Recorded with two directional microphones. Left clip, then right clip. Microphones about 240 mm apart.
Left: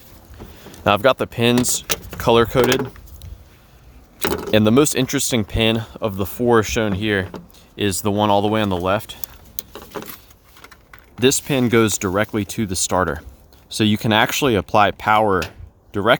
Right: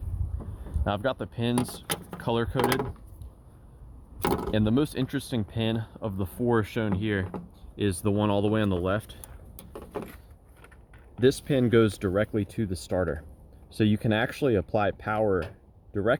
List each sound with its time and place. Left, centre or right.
0.9 s speech: left
4.3 s speech: left
11.2 s speech: left
15.4 s a sound: left